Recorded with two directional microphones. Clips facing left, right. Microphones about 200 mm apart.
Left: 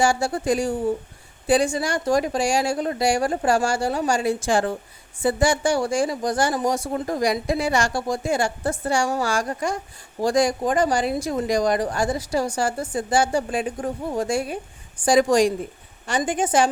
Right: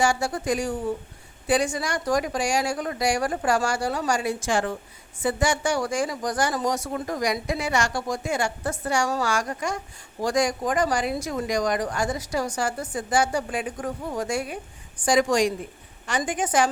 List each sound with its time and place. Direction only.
0.0 s speech: 30° left (ahead or behind)